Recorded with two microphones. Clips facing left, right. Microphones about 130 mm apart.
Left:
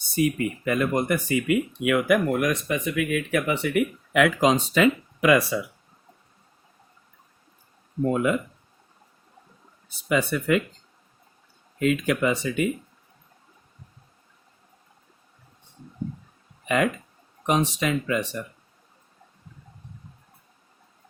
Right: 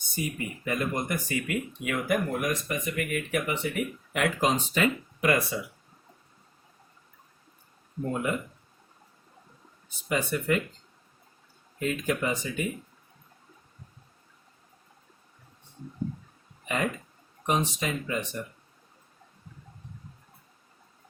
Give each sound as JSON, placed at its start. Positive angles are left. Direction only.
{"t": 0.2, "sound": "speech", "side_deg": 75}
{"t": 8.1, "sound": "speech", "side_deg": 90}
{"t": 10.1, "sound": "speech", "side_deg": 90}
{"t": 11.8, "sound": "speech", "side_deg": 90}
{"t": 16.6, "sound": "speech", "side_deg": 90}